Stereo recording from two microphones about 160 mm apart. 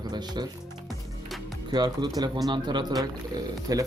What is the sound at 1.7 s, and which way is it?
Speech, 25° right (ahead or behind).